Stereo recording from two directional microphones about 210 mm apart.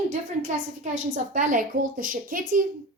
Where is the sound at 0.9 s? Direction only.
40° right (ahead or behind).